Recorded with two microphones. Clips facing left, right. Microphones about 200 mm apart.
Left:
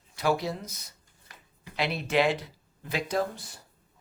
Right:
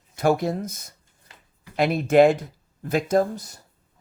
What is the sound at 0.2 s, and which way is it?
Speech, 50° right (ahead or behind).